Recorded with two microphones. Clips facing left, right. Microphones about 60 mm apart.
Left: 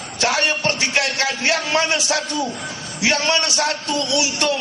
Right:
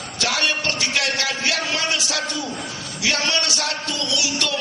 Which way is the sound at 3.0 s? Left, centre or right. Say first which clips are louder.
Left 4 dB; left.